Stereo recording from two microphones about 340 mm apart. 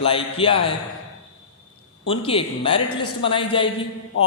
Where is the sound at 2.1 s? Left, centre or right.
Centre.